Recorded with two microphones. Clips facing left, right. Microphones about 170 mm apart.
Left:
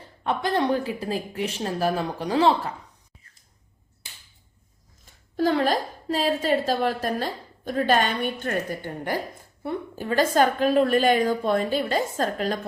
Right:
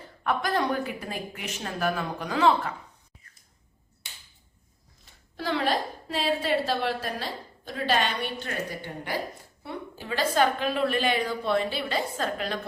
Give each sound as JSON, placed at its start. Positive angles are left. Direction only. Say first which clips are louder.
{"t": 0.3, "sound": "speech", "louder": "left 3 dB", "side_deg": 30}
{"t": 5.4, "sound": "a woman's voice", "louder": "left 5 dB", "side_deg": 45}